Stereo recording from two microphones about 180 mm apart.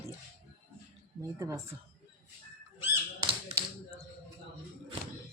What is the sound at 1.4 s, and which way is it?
Speech, 15° right (ahead or behind).